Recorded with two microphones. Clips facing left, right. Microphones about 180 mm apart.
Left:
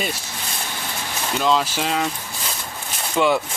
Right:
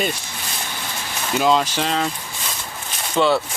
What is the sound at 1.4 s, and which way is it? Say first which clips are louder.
Speech: right 2 dB; 5° right (ahead or behind).